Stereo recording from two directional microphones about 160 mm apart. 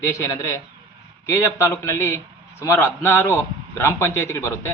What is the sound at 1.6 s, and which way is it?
A man's voice, 15° left (ahead or behind).